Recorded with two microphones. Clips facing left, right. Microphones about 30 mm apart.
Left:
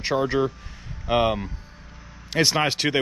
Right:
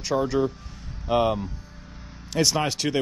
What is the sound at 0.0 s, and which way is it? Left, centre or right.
Speech, left.